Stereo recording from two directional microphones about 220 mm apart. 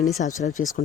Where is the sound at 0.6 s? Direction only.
65° left (ahead or behind).